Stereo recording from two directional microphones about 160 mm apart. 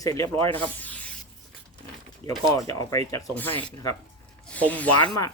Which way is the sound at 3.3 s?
10° left (ahead or behind).